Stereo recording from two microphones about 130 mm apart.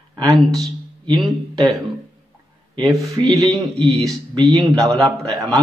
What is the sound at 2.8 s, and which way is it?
Speech, 25° right (ahead or behind).